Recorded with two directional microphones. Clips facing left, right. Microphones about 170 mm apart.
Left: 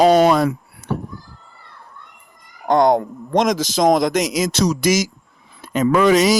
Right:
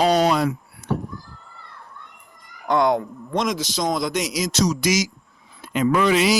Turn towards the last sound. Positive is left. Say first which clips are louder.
# left 4 dB
turn(degrees=45)  # may be behind; listen again after turning